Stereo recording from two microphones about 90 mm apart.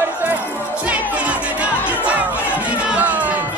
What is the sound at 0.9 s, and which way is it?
Music, 15° right (ahead or behind).